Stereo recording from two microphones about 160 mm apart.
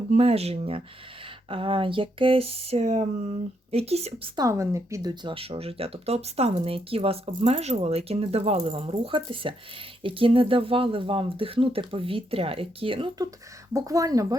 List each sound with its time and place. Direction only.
0.1 s speech: 40° right (ahead or behind)
4.4 s speech: 20° right (ahead or behind)
13.7 s speech: 20° right (ahead or behind)